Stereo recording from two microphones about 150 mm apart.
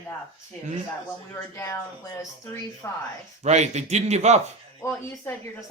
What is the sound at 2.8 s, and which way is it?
Speech, 15° left (ahead or behind).